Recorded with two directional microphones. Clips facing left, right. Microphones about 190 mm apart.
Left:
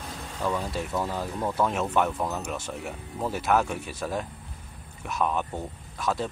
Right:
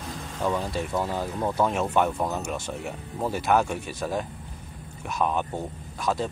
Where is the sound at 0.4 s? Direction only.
5° right (ahead or behind).